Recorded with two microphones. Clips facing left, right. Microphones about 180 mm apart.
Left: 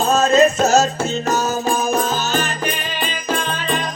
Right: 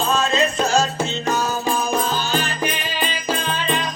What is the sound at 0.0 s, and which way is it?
Music, 45° left (ahead or behind).